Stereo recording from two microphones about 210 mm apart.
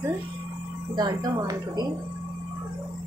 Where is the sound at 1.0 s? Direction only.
20° right (ahead or behind).